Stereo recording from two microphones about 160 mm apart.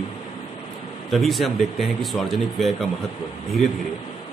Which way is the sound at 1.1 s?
Centre (ahead or behind).